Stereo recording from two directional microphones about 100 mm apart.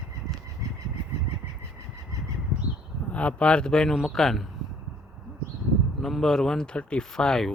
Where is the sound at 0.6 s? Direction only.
30° right (ahead or behind).